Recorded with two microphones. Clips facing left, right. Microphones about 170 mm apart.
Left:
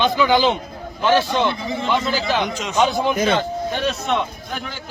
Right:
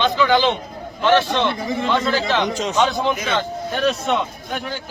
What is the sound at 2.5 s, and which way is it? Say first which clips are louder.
Speech: right 4 dB; 35° right (ahead or behind).